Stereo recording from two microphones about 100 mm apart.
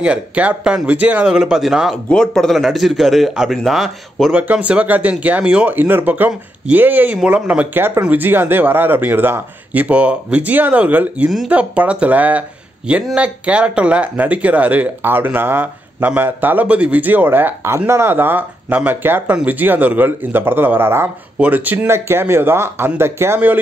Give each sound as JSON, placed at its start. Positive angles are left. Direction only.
{"t": 0.0, "sound": "speech", "side_deg": -15}
{"t": 4.3, "sound": "speech", "side_deg": -15}